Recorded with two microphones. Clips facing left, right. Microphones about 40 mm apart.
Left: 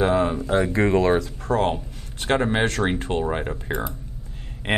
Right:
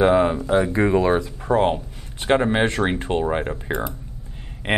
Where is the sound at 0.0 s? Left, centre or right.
Centre.